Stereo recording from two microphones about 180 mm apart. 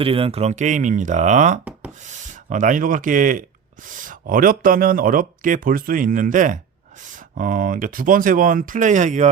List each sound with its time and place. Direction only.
0.0 s speech: 30° right (ahead or behind)